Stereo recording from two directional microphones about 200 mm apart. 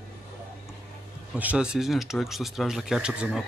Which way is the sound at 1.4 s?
5° right (ahead or behind).